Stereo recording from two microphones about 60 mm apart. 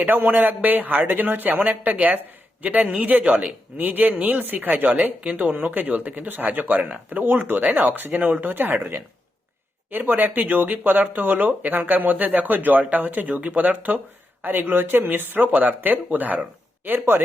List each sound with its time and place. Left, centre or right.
0.0 s speech: right